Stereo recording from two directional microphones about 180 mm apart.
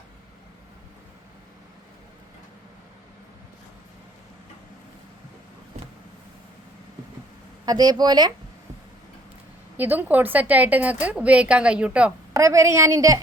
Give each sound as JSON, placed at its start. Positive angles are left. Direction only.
{"t": 7.6, "sound": "speech", "side_deg": -20}
{"t": 9.7, "sound": "a woman's voice", "side_deg": -10}
{"t": 12.3, "sound": "a woman's voice", "side_deg": -15}